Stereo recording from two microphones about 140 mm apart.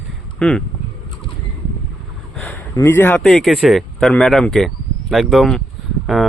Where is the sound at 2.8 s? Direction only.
15° left (ahead or behind).